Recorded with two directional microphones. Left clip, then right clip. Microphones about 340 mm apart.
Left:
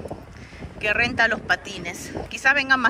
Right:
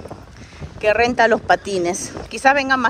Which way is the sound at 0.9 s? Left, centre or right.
Centre.